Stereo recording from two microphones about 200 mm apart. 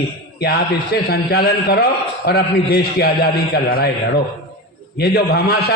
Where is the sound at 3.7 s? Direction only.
50° left (ahead or behind).